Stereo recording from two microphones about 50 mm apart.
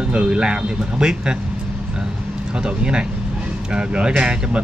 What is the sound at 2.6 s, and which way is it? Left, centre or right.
Speech, centre.